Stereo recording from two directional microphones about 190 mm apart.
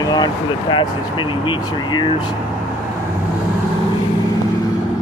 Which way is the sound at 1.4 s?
25° left (ahead or behind).